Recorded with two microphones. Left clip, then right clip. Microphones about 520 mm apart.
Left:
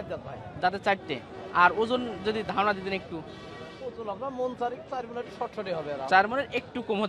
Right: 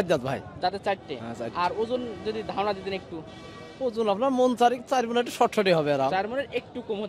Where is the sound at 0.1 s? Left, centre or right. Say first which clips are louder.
Right 11 dB; right.